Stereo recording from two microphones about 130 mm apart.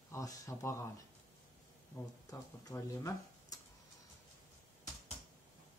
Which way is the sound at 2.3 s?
25° left (ahead or behind).